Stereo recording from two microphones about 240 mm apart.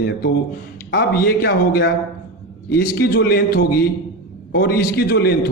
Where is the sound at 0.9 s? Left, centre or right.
Left.